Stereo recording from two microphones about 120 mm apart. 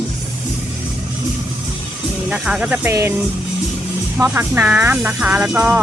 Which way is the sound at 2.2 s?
5° right (ahead or behind).